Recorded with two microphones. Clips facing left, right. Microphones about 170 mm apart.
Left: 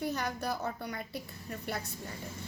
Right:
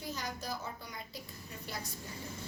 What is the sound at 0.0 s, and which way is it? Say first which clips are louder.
A woman's voice: left 7 dB; 60° left (ahead or behind).